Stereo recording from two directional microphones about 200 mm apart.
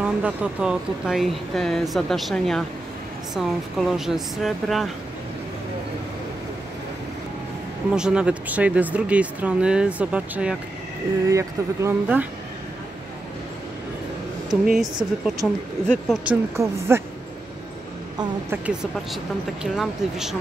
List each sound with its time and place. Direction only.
0.0 s speech: 5° right (ahead or behind)
7.9 s speech: 5° right (ahead or behind)
14.5 s speech: centre (ahead or behind)
16.5 s speech: 10° right (ahead or behind)
18.1 s a woman's voice: 20° right (ahead or behind)
19.6 s speech: centre (ahead or behind)